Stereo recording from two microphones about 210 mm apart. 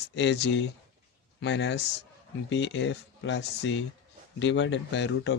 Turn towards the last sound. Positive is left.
turn(degrees=60)  # may be behind; listen again after turning